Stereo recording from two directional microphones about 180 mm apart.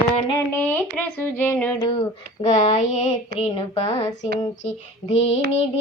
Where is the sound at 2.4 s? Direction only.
40° left (ahead or behind).